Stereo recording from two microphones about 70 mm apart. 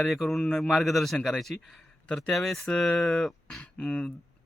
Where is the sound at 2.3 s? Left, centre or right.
Centre.